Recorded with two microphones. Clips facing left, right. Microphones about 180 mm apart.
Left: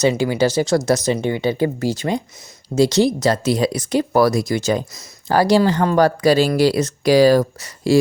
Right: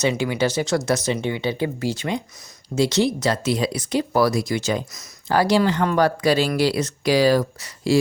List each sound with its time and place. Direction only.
0.0 s speech: 35° left (ahead or behind)